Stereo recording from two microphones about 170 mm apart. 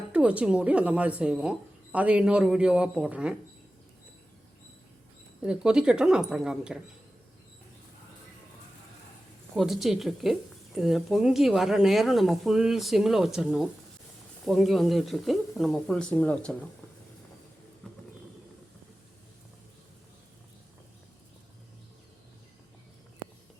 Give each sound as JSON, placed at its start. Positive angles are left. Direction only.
{"t": 0.1, "sound": "speech", "side_deg": -5}
{"t": 5.4, "sound": "speech", "side_deg": -5}
{"t": 9.6, "sound": "speech", "side_deg": 0}